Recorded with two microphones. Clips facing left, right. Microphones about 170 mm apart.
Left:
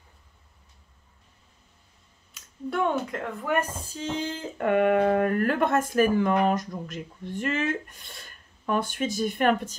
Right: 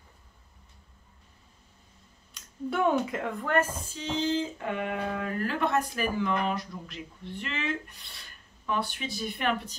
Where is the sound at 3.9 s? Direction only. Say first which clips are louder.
Left 3 dB; 45° left (ahead or behind).